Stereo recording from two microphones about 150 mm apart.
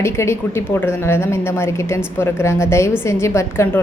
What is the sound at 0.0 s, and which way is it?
A woman's voice, 15° left (ahead or behind).